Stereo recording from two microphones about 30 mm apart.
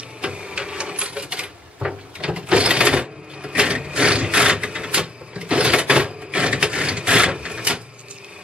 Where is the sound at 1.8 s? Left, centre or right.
Right.